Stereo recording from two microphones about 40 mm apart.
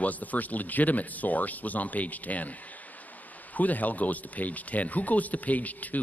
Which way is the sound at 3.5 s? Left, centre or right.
Left.